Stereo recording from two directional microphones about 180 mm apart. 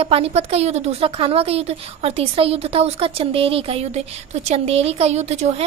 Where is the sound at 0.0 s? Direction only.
35° right (ahead or behind).